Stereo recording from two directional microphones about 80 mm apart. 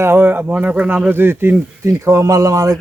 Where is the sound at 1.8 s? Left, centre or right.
Right.